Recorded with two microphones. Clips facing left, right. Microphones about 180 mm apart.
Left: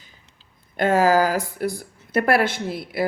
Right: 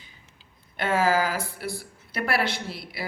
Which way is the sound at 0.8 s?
45° left (ahead or behind).